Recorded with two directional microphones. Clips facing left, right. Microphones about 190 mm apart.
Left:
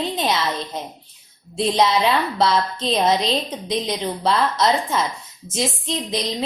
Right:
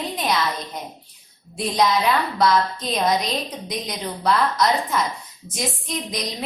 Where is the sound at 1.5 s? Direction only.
25° left (ahead or behind).